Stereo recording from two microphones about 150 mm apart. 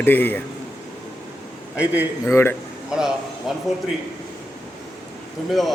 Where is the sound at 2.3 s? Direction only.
15° left (ahead or behind).